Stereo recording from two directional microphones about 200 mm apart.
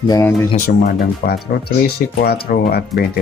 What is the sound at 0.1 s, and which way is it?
Speech, 10° left (ahead or behind).